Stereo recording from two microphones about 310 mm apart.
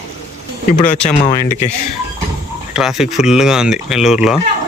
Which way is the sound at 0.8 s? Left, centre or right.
Left.